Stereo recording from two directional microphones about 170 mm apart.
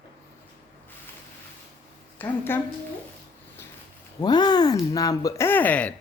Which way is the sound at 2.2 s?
10° left (ahead or behind).